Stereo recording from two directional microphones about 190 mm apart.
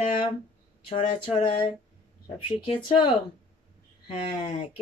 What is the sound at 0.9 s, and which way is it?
A woman's voice, 35° left (ahead or behind).